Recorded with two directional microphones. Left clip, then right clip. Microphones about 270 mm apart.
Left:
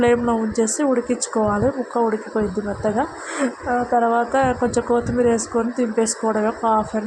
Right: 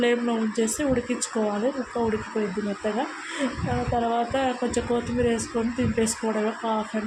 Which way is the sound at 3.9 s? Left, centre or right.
Centre.